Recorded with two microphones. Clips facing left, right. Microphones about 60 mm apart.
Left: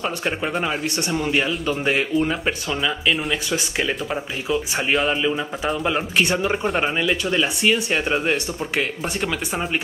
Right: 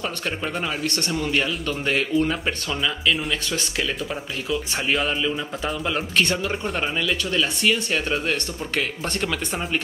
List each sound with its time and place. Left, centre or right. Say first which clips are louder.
0.6 s a man's voice: left 2 dB; centre
5.9 s a man's voice: left 1 dB; centre